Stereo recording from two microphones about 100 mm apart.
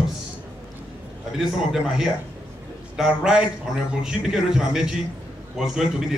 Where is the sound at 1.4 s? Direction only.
5° right (ahead or behind).